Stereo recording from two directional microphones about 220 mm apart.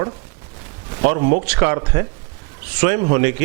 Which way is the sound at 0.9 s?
20° right (ahead or behind).